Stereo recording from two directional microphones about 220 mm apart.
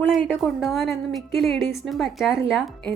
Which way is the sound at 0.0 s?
Centre (ahead or behind).